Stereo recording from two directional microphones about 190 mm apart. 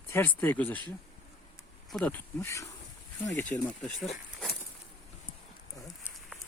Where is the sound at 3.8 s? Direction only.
5° left (ahead or behind).